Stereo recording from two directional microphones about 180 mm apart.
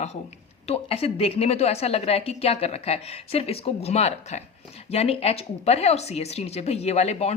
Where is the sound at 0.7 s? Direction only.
30° left (ahead or behind).